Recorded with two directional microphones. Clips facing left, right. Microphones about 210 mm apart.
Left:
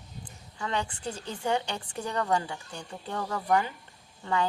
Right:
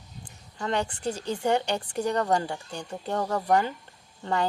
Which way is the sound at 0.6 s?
40° right (ahead or behind).